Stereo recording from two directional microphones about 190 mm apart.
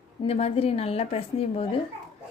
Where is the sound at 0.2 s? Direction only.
30° left (ahead or behind).